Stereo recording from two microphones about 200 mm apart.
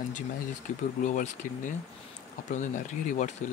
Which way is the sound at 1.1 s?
40° left (ahead or behind).